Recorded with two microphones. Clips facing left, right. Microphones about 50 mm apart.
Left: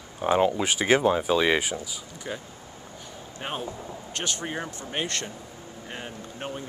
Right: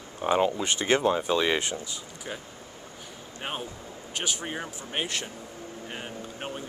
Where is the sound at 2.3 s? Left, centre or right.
Centre.